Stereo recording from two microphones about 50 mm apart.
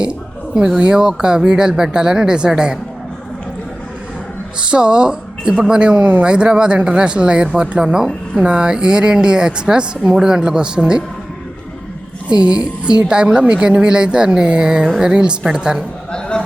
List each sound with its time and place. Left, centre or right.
0.0 s speech: centre
4.6 s a woman's voice: centre
12.3 s a woman's voice: right